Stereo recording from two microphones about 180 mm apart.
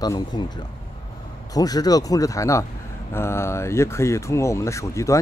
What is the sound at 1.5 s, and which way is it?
Speech, 20° left (ahead or behind).